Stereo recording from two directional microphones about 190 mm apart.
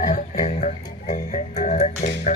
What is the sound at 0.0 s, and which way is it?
Music, 40° left (ahead or behind).